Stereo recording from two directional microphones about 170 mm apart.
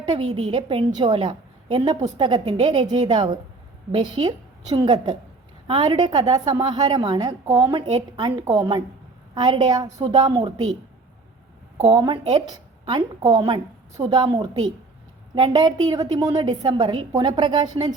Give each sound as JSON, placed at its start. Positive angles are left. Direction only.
{"t": 0.1, "sound": "a woman's voice", "side_deg": -35}
{"t": 11.8, "sound": "a woman's voice", "side_deg": -30}